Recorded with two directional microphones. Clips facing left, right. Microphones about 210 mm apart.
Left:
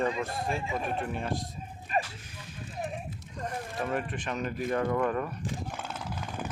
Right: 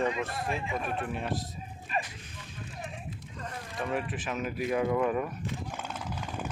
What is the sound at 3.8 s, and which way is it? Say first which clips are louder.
Speech: right 1 dB; centre (ahead or behind).